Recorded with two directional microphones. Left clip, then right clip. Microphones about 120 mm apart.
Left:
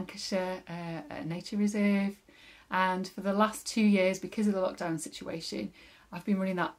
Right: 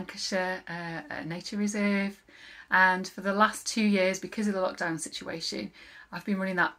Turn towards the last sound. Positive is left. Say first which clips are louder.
# right 4 dB
turn(degrees=35)  # may be behind; listen again after turning